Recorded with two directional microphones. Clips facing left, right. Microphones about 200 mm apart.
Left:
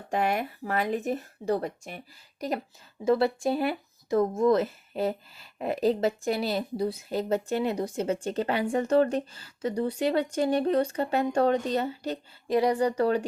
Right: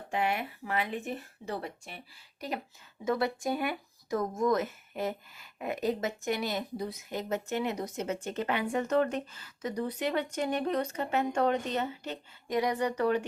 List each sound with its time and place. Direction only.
0.1 s speech: 40° left (ahead or behind)
3.0 s speech: 30° left (ahead or behind)